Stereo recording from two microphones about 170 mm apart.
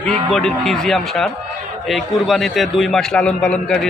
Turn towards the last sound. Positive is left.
turn(degrees=5)  # may be behind; listen again after turning